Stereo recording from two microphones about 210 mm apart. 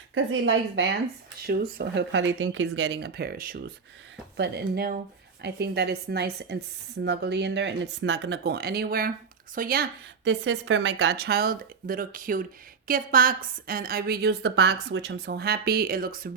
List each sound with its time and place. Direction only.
0.1 s speech: 65° right (ahead or behind); by 3.6 s 40° right (ahead or behind)
4.4 s speech: 55° right (ahead or behind)